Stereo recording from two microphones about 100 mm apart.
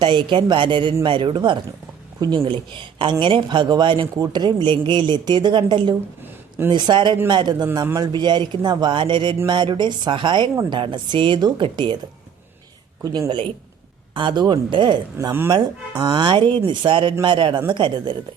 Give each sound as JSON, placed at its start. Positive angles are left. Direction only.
{"t": 0.0, "sound": "a woman's voice", "side_deg": -50}
{"t": 13.0, "sound": "a man's voice", "side_deg": -35}
{"t": 14.2, "sound": "a woman's voice", "side_deg": -50}